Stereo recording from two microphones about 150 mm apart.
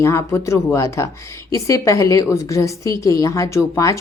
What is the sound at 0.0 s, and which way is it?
Speech, 20° left (ahead or behind).